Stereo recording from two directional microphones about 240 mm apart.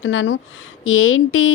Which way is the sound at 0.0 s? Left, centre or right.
Left.